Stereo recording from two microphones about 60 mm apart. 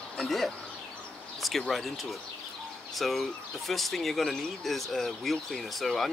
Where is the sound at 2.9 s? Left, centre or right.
Centre.